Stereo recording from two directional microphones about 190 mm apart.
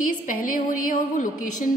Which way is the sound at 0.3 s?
45° left (ahead or behind).